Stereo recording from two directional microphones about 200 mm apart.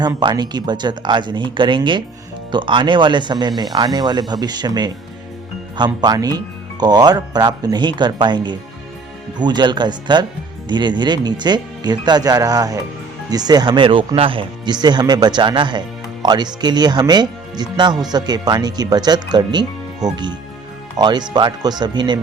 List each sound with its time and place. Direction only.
0.0 s speech: 20° right (ahead or behind)